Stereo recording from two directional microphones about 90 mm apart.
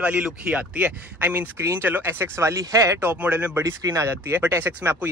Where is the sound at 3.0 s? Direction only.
20° right (ahead or behind).